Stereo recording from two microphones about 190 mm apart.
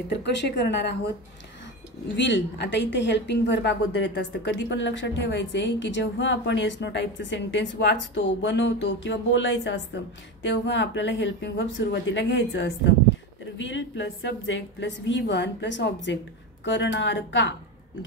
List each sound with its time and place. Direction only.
0.1 s a woman's voice: 65° left (ahead or behind)
2.1 s a woman's voice: 75° left (ahead or behind)